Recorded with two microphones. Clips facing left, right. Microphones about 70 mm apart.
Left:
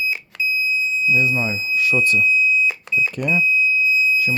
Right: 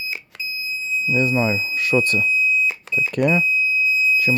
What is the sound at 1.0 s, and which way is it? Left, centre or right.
Speech, right.